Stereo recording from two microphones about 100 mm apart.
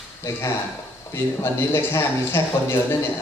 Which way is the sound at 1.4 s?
25° left (ahead or behind).